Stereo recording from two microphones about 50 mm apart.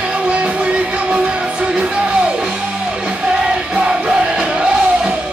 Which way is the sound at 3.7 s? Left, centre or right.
Centre.